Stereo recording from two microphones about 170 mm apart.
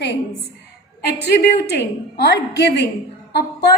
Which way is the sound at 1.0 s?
70° left (ahead or behind).